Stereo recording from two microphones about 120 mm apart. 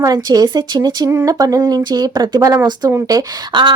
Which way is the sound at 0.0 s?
30° right (ahead or behind).